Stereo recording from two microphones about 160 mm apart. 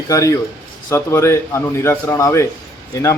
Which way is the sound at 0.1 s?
20° left (ahead or behind).